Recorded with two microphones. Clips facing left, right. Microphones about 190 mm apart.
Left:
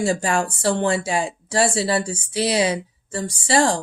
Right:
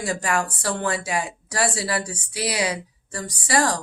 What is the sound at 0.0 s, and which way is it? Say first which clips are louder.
Speech: left 4 dB; 25° left (ahead or behind).